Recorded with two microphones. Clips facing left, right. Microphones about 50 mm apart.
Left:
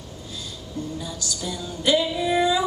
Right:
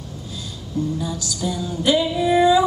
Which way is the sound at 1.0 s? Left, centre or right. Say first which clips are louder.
Right 6 dB; centre.